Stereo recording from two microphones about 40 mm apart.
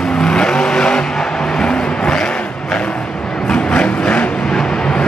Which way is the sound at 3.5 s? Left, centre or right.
Left.